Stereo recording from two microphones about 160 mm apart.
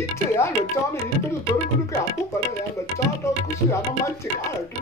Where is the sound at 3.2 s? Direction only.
20° left (ahead or behind).